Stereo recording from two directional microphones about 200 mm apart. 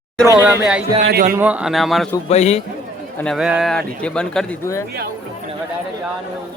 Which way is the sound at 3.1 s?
5° left (ahead or behind).